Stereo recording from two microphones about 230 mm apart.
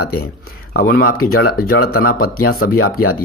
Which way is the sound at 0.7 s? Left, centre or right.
Left.